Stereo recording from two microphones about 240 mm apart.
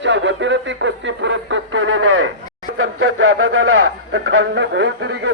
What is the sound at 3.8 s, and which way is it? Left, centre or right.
Speech, right.